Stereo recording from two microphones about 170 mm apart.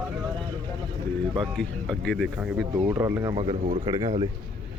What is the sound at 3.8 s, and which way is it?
Speech, 20° right (ahead or behind).